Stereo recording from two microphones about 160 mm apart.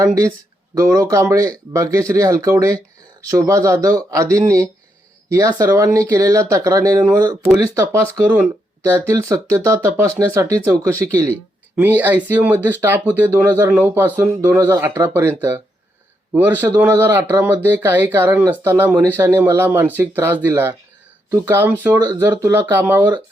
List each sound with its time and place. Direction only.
0.0 s speech: 20° right (ahead or behind)
11.8 s speech: 10° right (ahead or behind)